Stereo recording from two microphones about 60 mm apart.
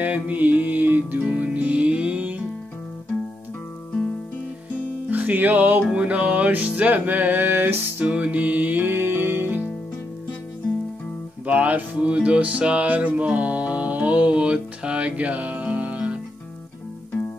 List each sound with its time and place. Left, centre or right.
0.0 s music: right
5.1 s music: right
8.0 s music: centre; by 9.6 s right
11.4 s music: right